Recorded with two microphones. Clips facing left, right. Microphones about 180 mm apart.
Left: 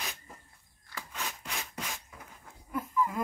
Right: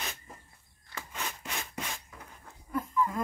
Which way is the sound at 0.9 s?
Centre (ahead or behind).